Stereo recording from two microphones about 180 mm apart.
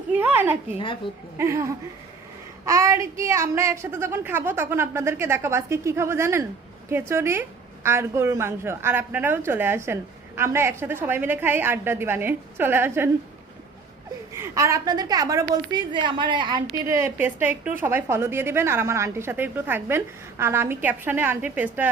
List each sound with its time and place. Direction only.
0.1 s a sound: 10° right (ahead or behind)
0.8 s a woman's voice: 30° left (ahead or behind)
1.4 s a woman's voice: 15° right (ahead or behind)
14.3 s a woman's voice: 15° right (ahead or behind)